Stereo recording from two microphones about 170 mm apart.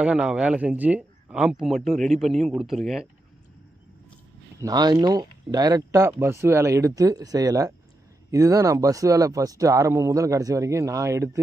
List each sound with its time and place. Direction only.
0.0 s a man's voice: 5° right (ahead or behind)
4.6 s speech: 25° right (ahead or behind)